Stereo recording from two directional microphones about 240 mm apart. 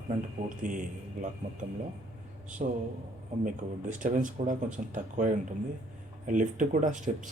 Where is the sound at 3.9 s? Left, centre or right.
Right.